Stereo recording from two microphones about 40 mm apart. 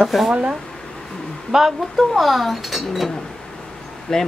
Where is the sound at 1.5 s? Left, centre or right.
Centre.